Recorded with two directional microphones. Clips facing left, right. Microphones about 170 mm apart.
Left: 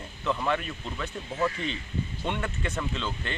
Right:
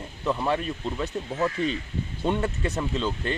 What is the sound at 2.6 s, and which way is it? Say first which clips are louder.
Speech: right 5 dB; 40° right (ahead or behind).